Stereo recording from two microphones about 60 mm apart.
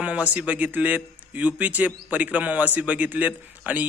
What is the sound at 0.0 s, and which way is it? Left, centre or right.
A man's voice, right.